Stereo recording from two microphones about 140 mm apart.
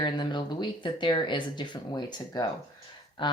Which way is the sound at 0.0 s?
35° left (ahead or behind).